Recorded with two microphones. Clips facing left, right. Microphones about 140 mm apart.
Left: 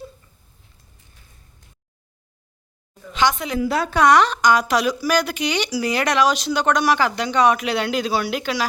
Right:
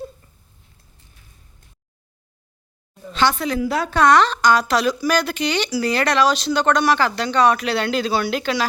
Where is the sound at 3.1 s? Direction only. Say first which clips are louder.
Right 1 dB; 15° left (ahead or behind).